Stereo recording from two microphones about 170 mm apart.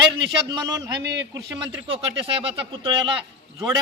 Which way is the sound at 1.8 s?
35° right (ahead or behind).